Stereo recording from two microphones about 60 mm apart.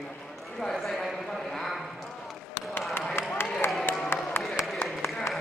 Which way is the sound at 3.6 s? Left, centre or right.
Left.